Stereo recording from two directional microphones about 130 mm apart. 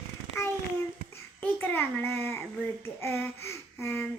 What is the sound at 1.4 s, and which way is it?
A child's voice, 15° left (ahead or behind).